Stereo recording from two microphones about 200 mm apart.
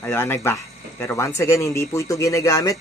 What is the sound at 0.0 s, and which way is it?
A man's voice, 10° left (ahead or behind).